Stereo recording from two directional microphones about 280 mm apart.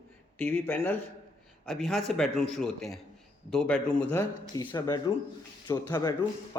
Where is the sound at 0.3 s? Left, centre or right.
Centre.